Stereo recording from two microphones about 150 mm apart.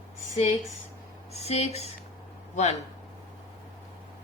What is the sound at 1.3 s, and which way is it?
Speech, 45° left (ahead or behind).